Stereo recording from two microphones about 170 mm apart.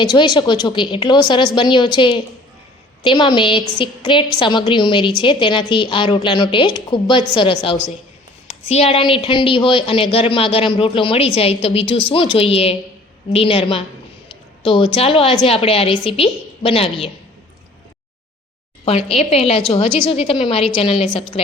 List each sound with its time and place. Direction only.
0.0 s a woman's voice: 25° left (ahead or behind)
18.9 s a woman's voice: 35° left (ahead or behind)